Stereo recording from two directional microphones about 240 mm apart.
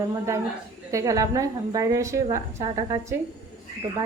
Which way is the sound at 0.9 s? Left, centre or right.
Centre.